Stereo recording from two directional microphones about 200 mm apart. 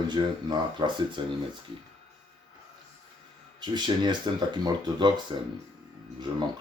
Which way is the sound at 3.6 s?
20° right (ahead or behind).